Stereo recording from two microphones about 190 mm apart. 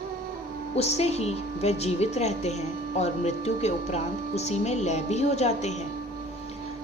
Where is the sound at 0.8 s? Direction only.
35° left (ahead or behind).